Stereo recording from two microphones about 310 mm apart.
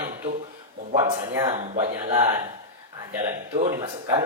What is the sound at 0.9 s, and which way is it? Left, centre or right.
Speech, centre.